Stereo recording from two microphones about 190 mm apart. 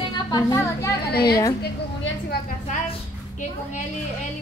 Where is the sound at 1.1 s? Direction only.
55° left (ahead or behind).